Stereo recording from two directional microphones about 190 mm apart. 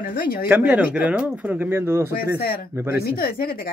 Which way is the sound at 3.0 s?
55° left (ahead or behind).